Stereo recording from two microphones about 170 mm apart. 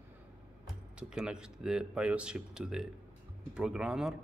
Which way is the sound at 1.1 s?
5° right (ahead or behind).